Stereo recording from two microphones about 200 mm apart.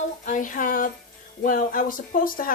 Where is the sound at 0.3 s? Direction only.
40° left (ahead or behind).